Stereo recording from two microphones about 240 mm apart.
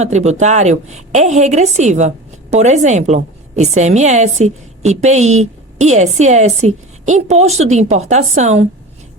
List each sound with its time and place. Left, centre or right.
0.0 s a woman's voice: right